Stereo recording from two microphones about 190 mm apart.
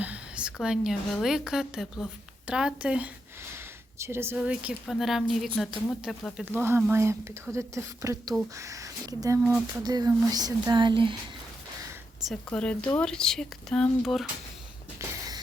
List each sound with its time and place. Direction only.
0.0 s a woman's voice: 5° right (ahead or behind); by 11.2 s 25° right (ahead or behind)
12.3 s speech: 5° left (ahead or behind)
15.0 s a sound: 15° right (ahead or behind)